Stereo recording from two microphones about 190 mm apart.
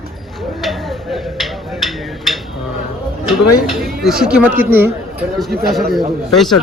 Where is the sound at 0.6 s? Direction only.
Centre (ahead or behind).